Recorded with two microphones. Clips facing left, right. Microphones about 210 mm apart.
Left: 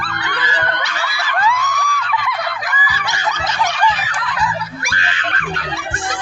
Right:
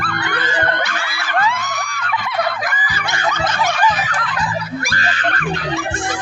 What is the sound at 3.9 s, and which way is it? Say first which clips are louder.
Fowl: right 1 dB; 45° right (ahead or behind).